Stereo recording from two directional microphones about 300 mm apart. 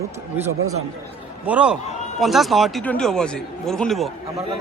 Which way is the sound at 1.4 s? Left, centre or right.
Centre.